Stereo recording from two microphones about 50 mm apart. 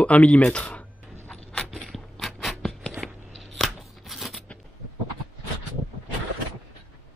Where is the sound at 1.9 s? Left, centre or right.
Centre.